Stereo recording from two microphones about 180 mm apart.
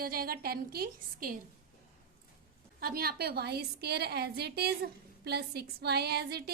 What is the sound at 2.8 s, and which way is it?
A woman's voice, 55° right (ahead or behind).